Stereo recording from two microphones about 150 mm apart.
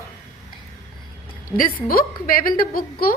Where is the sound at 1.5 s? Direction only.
70° left (ahead or behind).